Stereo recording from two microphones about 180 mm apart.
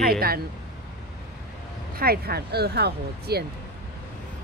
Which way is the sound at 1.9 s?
60° right (ahead or behind).